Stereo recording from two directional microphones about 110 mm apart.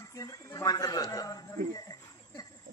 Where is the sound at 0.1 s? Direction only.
30° left (ahead or behind).